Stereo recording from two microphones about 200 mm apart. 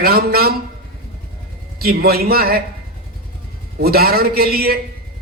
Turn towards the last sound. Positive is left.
turn(degrees=-50)  # may be behind; listen again after turning